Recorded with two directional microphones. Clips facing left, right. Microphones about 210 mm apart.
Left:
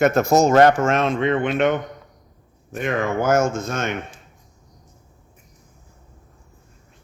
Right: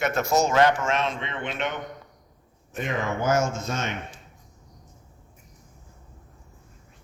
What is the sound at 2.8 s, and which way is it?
Speech, 55° left (ahead or behind).